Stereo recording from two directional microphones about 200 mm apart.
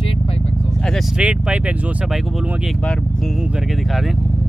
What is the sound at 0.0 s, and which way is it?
Vehicle, 25° left (ahead or behind).